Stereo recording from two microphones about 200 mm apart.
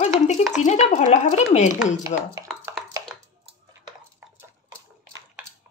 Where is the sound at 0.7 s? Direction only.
35° left (ahead or behind).